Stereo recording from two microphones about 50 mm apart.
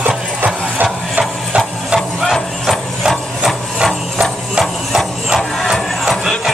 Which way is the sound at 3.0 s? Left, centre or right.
Centre.